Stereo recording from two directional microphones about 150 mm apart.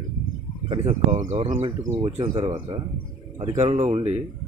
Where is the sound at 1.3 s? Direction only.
50° right (ahead or behind).